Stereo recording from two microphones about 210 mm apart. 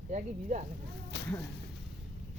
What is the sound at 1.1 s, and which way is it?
Whip, 55° left (ahead or behind).